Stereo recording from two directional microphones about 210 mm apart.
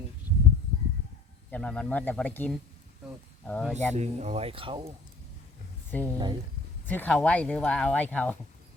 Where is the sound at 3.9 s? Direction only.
30° right (ahead or behind).